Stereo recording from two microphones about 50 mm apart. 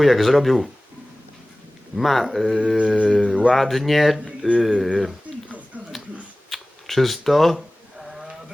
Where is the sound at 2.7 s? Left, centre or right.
Right.